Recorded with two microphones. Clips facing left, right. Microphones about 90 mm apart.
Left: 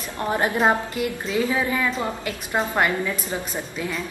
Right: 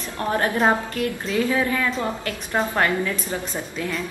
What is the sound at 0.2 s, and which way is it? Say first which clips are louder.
A woman's voice: even; 15° left (ahead or behind).